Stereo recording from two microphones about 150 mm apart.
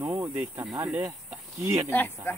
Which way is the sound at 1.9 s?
15° left (ahead or behind).